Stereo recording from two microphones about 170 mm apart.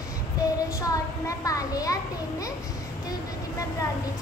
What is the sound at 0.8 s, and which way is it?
A child's voice, 20° left (ahead or behind).